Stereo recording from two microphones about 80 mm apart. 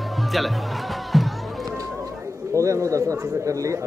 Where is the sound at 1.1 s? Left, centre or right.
Centre.